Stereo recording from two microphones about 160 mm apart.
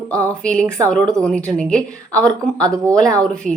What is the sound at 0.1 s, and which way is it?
A woman's voice, 5° left (ahead or behind).